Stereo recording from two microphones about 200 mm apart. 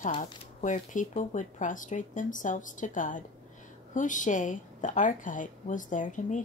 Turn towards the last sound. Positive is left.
turn(degrees=40)  # may be behind; listen again after turning